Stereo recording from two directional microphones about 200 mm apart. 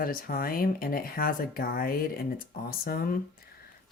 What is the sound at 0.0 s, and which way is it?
Speech, 45° left (ahead or behind).